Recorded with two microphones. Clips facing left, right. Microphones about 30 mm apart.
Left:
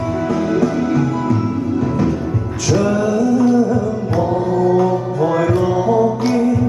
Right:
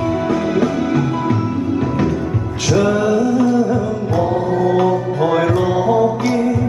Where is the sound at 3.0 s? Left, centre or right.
Right.